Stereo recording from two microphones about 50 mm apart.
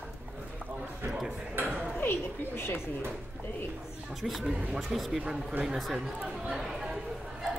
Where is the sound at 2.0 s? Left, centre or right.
Left.